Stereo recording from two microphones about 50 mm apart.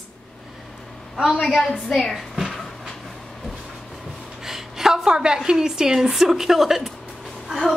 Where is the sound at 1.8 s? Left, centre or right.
Centre.